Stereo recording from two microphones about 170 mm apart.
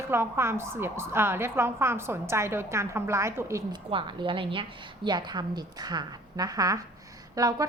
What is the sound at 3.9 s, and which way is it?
A woman's voice, 30° right (ahead or behind).